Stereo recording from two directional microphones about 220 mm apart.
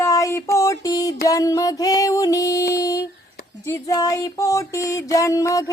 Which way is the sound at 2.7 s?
15° left (ahead or behind).